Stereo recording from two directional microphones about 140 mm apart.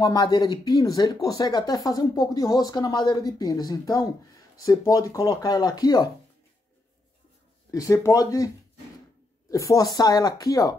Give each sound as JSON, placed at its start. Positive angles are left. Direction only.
{"t": 0.0, "sound": "speech", "side_deg": 30}
{"t": 7.7, "sound": "speech", "side_deg": 20}
{"t": 9.5, "sound": "speech", "side_deg": 25}